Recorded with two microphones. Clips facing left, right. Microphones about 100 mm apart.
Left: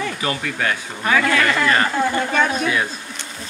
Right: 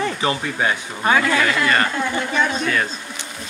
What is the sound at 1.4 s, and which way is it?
Speech, centre (ahead or behind).